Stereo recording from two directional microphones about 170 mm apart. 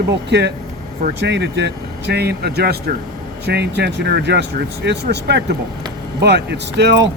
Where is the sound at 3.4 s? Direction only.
80° right.